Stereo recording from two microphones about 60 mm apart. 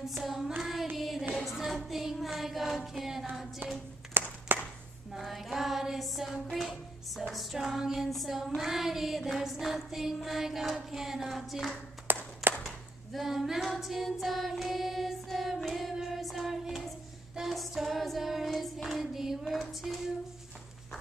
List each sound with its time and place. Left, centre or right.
0.2 s music: centre
0.6 s child singing: centre
0.9 s music: centre
4.2 s a sound: right
5.1 s music: centre
10.9 s a sound: centre
12.1 s clapping: right
12.6 s a sound: centre
13.7 s music: centre